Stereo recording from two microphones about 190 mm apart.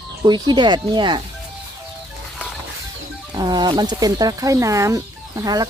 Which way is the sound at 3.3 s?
20° right (ahead or behind).